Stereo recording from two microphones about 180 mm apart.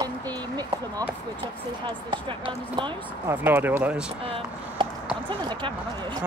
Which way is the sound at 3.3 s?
10° right (ahead or behind).